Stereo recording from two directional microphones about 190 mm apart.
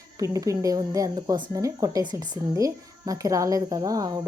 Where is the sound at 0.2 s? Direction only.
15° right (ahead or behind).